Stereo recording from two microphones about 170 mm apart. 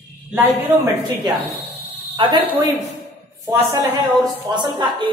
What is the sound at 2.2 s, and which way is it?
A woman's voice, 30° right (ahead or behind).